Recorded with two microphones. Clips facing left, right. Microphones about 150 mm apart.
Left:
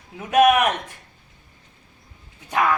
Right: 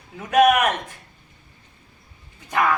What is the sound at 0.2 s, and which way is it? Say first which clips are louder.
Speech: even; 5° left (ahead or behind).